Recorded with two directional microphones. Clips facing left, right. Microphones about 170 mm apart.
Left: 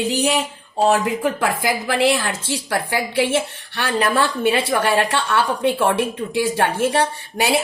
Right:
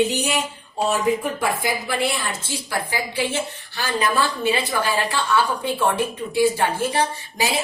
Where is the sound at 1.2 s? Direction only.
90° left.